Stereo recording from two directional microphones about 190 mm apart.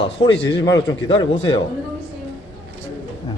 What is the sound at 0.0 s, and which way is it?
Speech, 30° left (ahead or behind).